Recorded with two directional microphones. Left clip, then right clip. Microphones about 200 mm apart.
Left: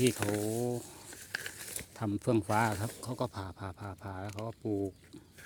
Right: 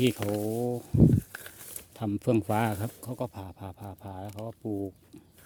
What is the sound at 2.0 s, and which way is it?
Speech, 40° right (ahead or behind).